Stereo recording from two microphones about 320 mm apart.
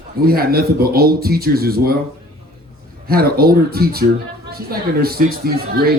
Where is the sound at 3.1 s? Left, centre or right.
Right.